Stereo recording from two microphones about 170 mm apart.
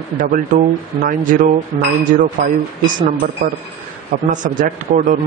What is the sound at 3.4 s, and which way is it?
Speech, 45° right (ahead or behind).